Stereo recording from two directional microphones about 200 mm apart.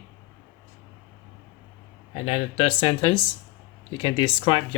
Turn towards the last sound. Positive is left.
turn(degrees=25)  # may be behind; listen again after turning